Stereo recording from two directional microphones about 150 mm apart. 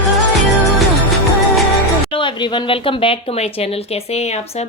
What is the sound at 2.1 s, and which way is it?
Speech, 30° left (ahead or behind).